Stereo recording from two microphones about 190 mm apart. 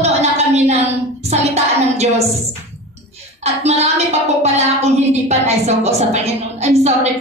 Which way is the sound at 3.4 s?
35° right (ahead or behind).